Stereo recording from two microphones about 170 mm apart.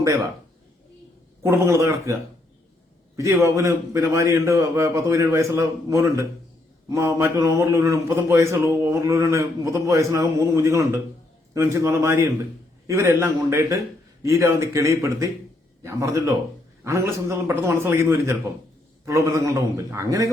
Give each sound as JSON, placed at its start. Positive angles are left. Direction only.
{"t": 0.0, "sound": "a man's voice", "side_deg": -15}
{"t": 1.5, "sound": "a man's voice", "side_deg": -15}
{"t": 3.2, "sound": "a man's voice", "side_deg": -15}